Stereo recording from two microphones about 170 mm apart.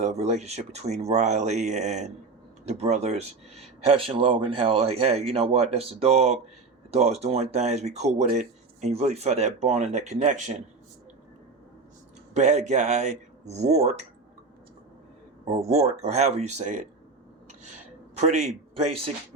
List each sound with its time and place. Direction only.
0.0 s speech: 40° right (ahead or behind)
12.3 s speech: 45° right (ahead or behind)
15.6 s speech: 40° right (ahead or behind)
18.1 s a man's voice: 40° right (ahead or behind)